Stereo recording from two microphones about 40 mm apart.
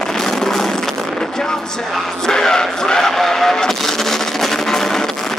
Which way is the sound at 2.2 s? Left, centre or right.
Centre.